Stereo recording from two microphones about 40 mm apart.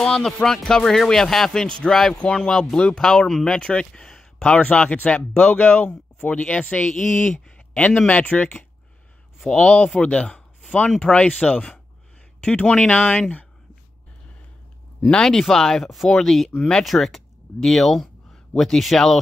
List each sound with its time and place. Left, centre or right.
0.0 s speech: centre
4.5 s speech: left
6.9 s speech: centre
7.5 s a sound: left
8.1 s speech: left
9.5 s speech: left
15.2 s speech: centre
16.1 s speech: centre
16.5 s speech: left
16.8 s speech: centre